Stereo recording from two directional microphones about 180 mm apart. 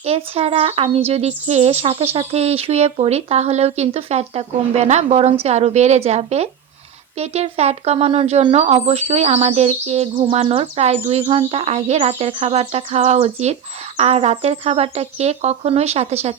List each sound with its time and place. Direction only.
0.0 s speech: 35° right (ahead or behind)